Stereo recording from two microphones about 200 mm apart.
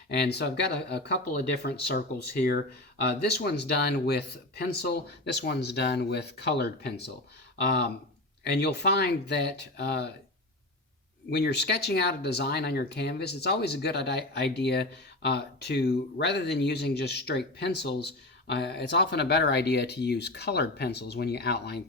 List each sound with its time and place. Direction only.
0.1 s speech: 55° left (ahead or behind)
8.4 s speech: 55° left (ahead or behind)
11.3 s speech: 55° left (ahead or behind)